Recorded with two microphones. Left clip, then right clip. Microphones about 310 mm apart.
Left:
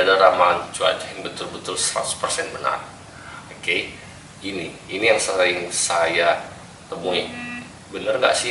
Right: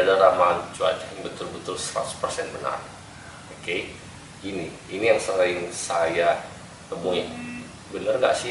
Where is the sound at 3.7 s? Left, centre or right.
Centre.